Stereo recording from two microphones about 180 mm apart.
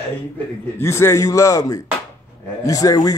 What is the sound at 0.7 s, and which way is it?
A man's voice, 15° left (ahead or behind).